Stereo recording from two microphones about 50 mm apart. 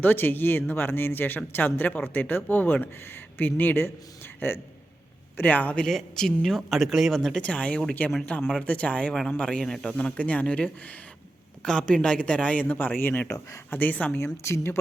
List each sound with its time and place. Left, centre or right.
0.0 s speech: left
5.4 s speech: left
5.9 s speech: centre
6.7 s speech: centre
7.1 s speech: centre
7.4 s speech: left
10.0 s speech: left
12.7 s speech: left
14.4 s speech: left